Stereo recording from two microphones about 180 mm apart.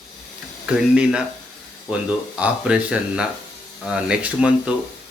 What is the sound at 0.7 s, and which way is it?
Speech, 5° right (ahead or behind).